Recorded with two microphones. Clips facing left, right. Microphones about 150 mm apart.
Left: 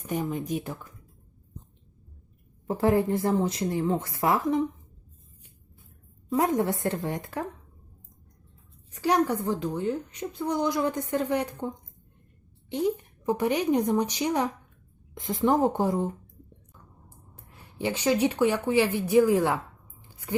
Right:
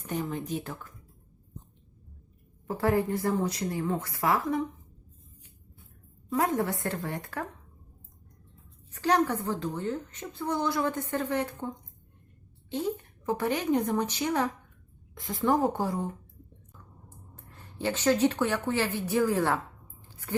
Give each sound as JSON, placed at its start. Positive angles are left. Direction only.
{"t": 0.1, "sound": "a woman's voice", "side_deg": 10}
{"t": 2.6, "sound": "speech", "side_deg": 20}
{"t": 6.3, "sound": "speech", "side_deg": 20}
{"t": 8.9, "sound": "a woman's voice", "side_deg": 10}
{"t": 12.7, "sound": "a woman's voice", "side_deg": 15}
{"t": 17.3, "sound": "a woman's voice", "side_deg": 10}